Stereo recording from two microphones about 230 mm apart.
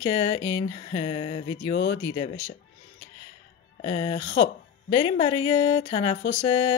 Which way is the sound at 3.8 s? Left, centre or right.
Left.